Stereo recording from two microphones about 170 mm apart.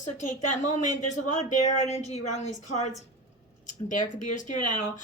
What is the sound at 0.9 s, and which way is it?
A woman's voice, 45° left (ahead or behind).